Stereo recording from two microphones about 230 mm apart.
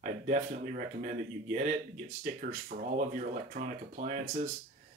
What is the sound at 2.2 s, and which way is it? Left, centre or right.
Speech, right.